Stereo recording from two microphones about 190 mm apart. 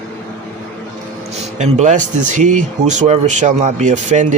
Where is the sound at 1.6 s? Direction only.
40° right (ahead or behind).